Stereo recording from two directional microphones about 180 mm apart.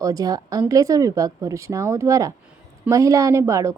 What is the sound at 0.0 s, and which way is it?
A woman's voice, 20° right (ahead or behind).